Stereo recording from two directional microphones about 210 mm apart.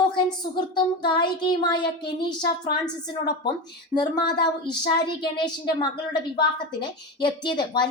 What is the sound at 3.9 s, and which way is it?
A woman's voice, 20° left (ahead or behind).